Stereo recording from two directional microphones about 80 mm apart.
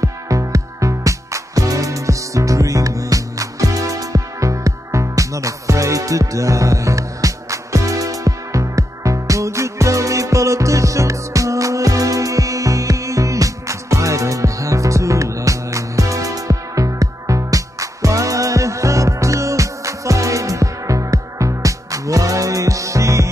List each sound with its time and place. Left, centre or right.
0.0 s music: right